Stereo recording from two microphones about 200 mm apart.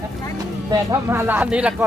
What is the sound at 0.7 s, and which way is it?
Speech, 15° right (ahead or behind).